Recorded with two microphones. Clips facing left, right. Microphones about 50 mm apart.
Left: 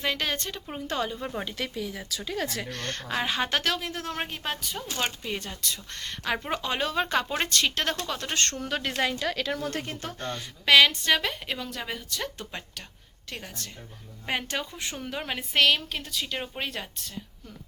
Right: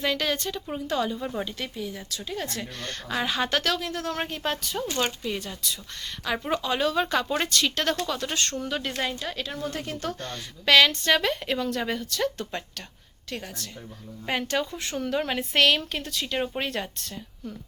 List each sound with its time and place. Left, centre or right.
0.0 s speech: left
1.5 s speech: left
2.8 s a woman's voice: left
3.2 s speech: left
4.2 s a woman's voice: centre
5.6 s speech: left
6.3 s speech: left
8.8 s speech: left
9.8 s a woman's voice: left; by 12.8 s centre
14.4 s a woman's voice: centre